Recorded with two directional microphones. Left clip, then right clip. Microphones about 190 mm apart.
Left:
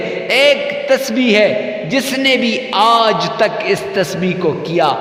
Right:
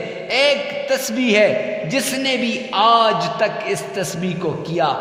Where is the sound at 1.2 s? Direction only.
15° left (ahead or behind).